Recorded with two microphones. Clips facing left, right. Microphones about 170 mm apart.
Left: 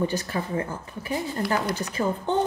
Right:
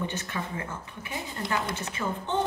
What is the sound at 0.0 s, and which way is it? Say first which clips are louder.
A woman's voice: left 6 dB; 35° left (ahead or behind).